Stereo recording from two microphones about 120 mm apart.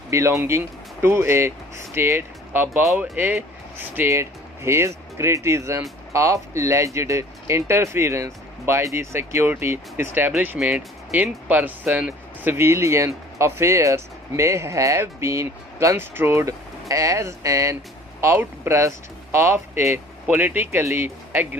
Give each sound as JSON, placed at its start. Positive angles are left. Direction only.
{"t": 0.1, "sound": "speech", "side_deg": -25}